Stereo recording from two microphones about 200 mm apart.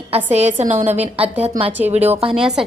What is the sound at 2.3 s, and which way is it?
Speech, 5° right (ahead or behind).